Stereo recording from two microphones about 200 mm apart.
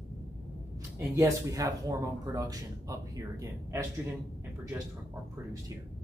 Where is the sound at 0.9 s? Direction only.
15° right (ahead or behind).